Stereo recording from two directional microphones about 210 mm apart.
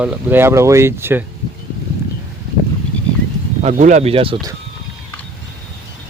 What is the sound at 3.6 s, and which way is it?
Speech, 35° right (ahead or behind).